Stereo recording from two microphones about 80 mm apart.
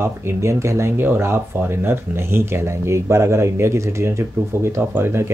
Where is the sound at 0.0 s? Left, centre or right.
Right.